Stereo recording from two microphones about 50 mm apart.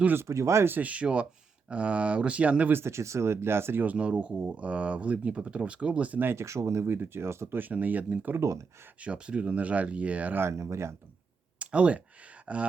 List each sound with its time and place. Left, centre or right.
0.2 s speech: right
0.8 s speech: right
2.7 s speech: right
3.8 s speech: right
6.3 s speech: right
6.8 s speech: right
7.6 s speech: right
8.4 s speech: right
9.0 s speech: right
10.5 s speech: right
11.6 s speech: right